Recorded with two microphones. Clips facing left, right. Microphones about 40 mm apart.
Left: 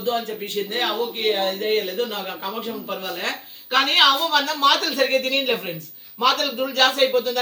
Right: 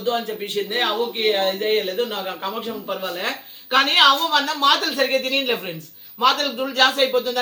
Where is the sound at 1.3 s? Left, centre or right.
Centre.